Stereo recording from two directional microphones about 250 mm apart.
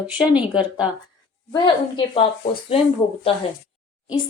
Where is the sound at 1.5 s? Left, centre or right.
Centre.